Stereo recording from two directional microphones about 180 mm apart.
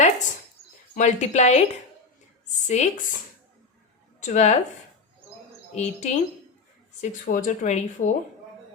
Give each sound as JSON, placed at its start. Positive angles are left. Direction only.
{"t": 0.9, "sound": "speech", "side_deg": 40}
{"t": 2.6, "sound": "speech", "side_deg": 40}
{"t": 4.2, "sound": "speech", "side_deg": 40}
{"t": 5.7, "sound": "speech", "side_deg": 35}